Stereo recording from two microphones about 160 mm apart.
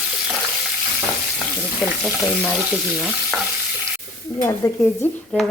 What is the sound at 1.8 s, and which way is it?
Frying, 5° left (ahead or behind).